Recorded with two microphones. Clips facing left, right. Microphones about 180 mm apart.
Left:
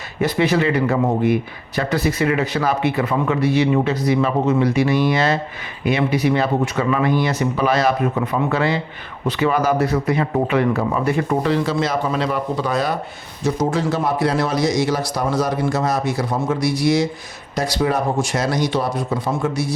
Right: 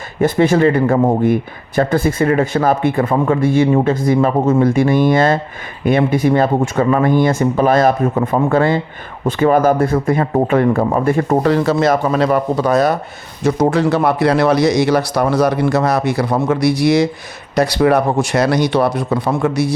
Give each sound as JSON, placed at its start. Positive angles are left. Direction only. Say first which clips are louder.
{"t": 0.2, "sound": "speech", "louder": "right 5 dB", "side_deg": -50}
{"t": 13.4, "sound": "speech", "louder": "right 6 dB", "side_deg": -65}